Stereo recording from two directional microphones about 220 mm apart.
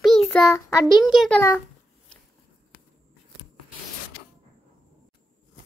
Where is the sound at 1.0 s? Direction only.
Centre (ahead or behind).